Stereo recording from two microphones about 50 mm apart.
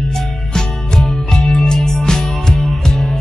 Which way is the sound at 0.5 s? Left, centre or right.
Centre.